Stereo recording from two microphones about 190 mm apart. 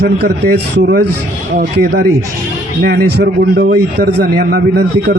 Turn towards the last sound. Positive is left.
turn(degrees=-60)  # may be behind; listen again after turning